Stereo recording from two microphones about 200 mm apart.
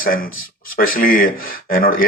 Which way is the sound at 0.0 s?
45° left (ahead or behind).